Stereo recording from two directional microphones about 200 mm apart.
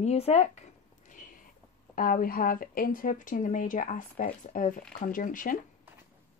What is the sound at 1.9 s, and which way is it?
Speech, 45° left (ahead or behind).